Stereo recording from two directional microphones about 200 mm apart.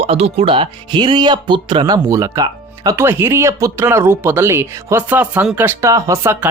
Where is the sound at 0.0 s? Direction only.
30° right (ahead or behind).